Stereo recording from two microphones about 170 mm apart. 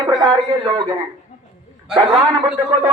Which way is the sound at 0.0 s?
25° right (ahead or behind).